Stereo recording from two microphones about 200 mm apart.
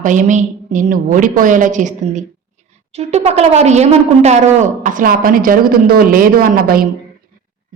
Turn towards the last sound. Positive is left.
turn(degrees=-45)  # may be behind; listen again after turning